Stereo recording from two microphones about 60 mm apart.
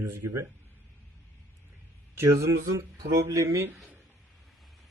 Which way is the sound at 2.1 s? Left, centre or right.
Right.